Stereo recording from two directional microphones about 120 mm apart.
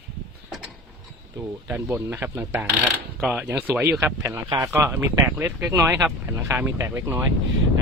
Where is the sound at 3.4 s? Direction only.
15° right (ahead or behind).